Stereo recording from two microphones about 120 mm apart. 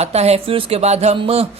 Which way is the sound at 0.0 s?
60° right (ahead or behind).